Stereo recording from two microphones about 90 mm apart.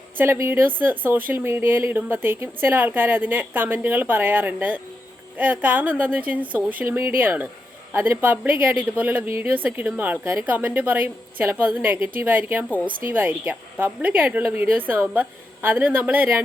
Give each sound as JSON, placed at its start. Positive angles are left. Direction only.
{"t": 0.2, "sound": "speech", "side_deg": -30}